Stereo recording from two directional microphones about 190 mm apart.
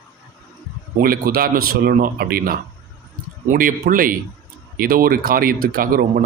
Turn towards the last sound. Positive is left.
turn(degrees=-50)  # may be behind; listen again after turning